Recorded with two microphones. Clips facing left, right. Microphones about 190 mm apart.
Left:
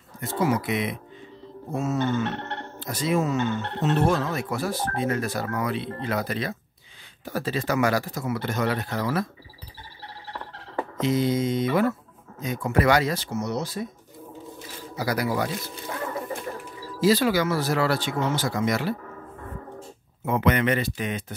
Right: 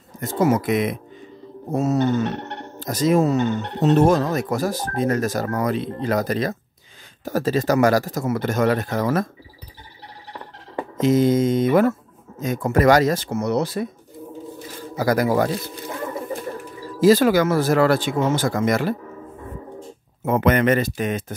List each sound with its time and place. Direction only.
0.2 s speech: 45° right (ahead or behind)
2.3 s music: 15° right (ahead or behind)
2.8 s speech: 40° right (ahead or behind)
11.0 s speech: 45° right (ahead or behind); by 13.8 s 65° right (ahead or behind)
15.0 s speech: 50° right (ahead or behind)
17.0 s speech: 45° right (ahead or behind)
20.2 s speech: 45° right (ahead or behind)